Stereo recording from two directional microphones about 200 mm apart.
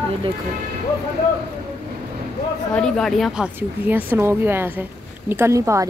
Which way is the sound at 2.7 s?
5° left (ahead or behind).